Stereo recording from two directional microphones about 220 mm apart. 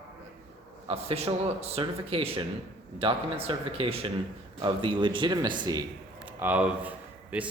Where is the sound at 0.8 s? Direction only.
30° right (ahead or behind).